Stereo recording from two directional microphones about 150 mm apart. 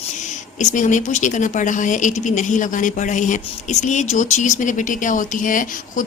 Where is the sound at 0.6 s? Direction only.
55° left (ahead or behind).